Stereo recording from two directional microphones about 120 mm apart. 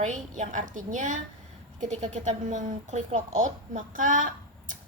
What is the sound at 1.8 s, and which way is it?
A woman's voice, 80° right.